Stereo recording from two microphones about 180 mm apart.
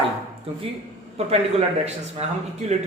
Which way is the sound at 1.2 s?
35° right (ahead or behind).